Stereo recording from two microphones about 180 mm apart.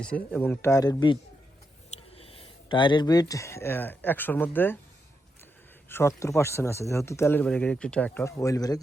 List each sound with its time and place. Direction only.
0.0 s speech: 5° left (ahead or behind)
5.9 s speech: 15° left (ahead or behind)